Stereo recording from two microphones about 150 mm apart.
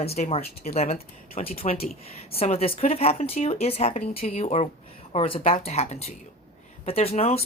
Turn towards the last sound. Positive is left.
turn(degrees=40)  # may be behind; listen again after turning